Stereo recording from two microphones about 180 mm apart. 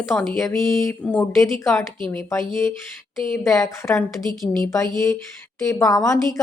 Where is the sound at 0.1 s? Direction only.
Centre (ahead or behind).